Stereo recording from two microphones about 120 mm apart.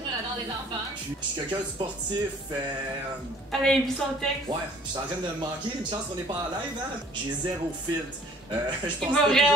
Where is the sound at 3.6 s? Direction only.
5° left (ahead or behind).